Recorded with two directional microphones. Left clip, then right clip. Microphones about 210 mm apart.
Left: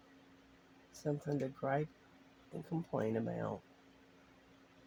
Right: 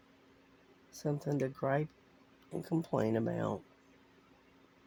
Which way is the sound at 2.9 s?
55° right (ahead or behind).